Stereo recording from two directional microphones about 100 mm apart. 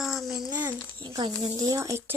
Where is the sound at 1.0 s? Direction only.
50° right (ahead or behind).